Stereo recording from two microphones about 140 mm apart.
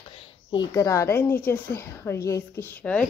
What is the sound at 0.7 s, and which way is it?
A woman's voice, 20° left (ahead or behind).